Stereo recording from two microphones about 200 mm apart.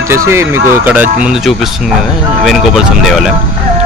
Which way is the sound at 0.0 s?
15° right (ahead or behind).